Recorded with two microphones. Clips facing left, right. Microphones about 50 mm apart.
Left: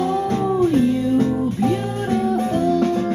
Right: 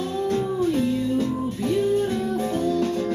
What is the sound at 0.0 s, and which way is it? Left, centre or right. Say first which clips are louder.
Music: left 4 dB; left.